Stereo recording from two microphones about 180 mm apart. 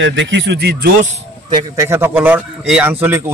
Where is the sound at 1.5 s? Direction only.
15° right (ahead or behind).